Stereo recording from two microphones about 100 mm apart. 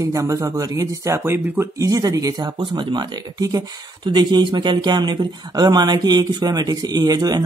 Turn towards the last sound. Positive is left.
turn(degrees=-40)  # may be behind; listen again after turning